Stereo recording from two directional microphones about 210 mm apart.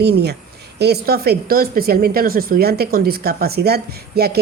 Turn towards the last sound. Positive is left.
turn(degrees=-50)  # may be behind; listen again after turning